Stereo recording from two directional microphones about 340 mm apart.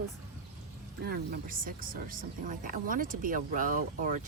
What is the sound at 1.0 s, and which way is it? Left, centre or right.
Speech, right.